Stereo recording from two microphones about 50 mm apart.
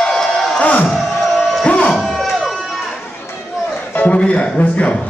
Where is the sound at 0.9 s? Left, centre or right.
Centre.